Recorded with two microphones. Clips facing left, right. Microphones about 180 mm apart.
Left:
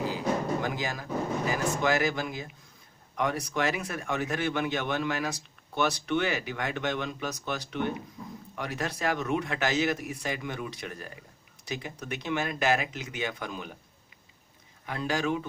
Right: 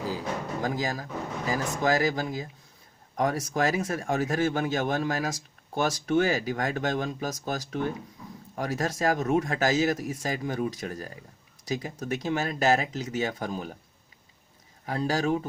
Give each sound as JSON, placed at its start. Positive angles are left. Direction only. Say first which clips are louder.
{"t": 0.6, "sound": "speech", "louder": "right 3 dB", "side_deg": -35}
{"t": 14.8, "sound": "speech", "louder": "right 3 dB", "side_deg": -40}